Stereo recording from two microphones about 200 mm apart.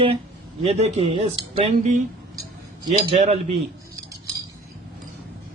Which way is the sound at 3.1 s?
30° right (ahead or behind).